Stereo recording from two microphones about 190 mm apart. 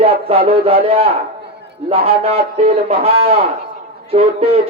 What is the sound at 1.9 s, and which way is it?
A man's voice, 30° right (ahead or behind).